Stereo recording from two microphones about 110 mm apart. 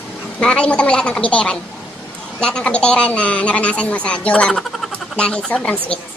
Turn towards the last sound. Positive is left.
turn(degrees=5)  # may be behind; listen again after turning